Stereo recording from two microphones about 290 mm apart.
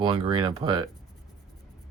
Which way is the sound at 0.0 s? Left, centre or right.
Centre.